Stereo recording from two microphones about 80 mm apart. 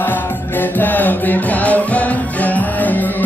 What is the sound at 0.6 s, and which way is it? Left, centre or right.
Music, left.